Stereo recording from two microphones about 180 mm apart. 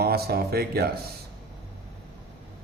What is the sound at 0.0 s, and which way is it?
Speech, 60° right (ahead or behind).